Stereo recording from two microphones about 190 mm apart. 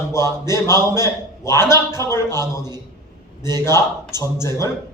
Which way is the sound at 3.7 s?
15° left (ahead or behind).